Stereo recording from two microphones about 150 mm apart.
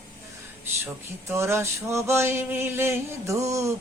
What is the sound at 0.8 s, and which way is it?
Male singing, 15° right (ahead or behind).